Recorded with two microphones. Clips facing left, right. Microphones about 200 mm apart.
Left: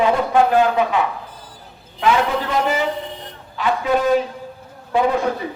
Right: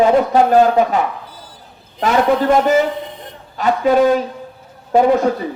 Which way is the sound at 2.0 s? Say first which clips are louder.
Right 5 dB; 45° right (ahead or behind).